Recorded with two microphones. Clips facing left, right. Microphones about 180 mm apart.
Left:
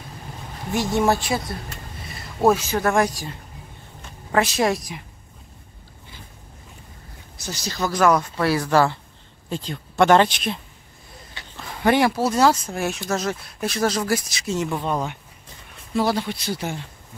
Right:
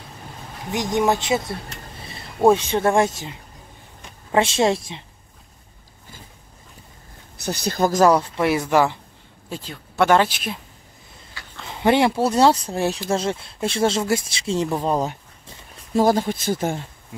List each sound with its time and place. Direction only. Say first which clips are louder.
0.7 s a woman's voice: even; 15° right (ahead or behind)
7.3 s speech: right 6 dB; 60° right (ahead or behind)
8.0 s speech: right 2 dB; 30° right (ahead or behind)
8.4 s speech: right 1 dB; 20° right (ahead or behind)
11.6 s a sound: right 1 dB; 20° right (ahead or behind)
12.4 s speech: right 2 dB; 30° right (ahead or behind); by 16.8 s 45° right (ahead or behind)